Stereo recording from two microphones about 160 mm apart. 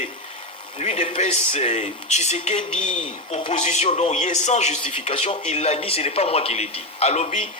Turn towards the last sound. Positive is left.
turn(degrees=45)  # may be behind; listen again after turning